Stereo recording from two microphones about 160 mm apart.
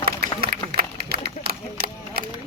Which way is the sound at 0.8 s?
70° right (ahead or behind).